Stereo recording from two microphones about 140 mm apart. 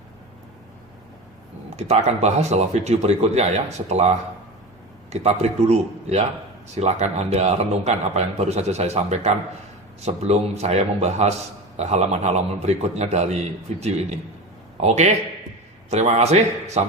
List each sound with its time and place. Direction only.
1.7 s a man's voice: 50° right (ahead or behind)
5.2 s a man's voice: 50° right (ahead or behind)